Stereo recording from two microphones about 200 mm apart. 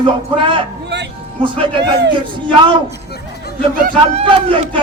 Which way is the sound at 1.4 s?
25° right (ahead or behind).